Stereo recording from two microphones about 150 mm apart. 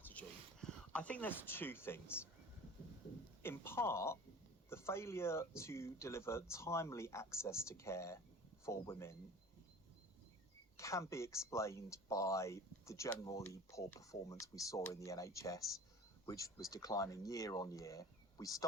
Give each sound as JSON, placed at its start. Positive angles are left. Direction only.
{"t": 0.0, "sound": "a sound", "side_deg": 10}
{"t": 3.4, "sound": "a woman's voice", "side_deg": 15}
{"t": 10.8, "sound": "speech", "side_deg": 20}